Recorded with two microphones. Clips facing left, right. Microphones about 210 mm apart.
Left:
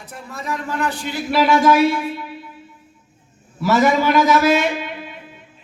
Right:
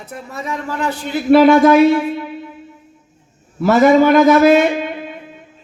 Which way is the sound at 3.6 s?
55° right (ahead or behind).